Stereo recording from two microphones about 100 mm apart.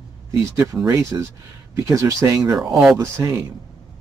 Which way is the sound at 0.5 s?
20° right (ahead or behind).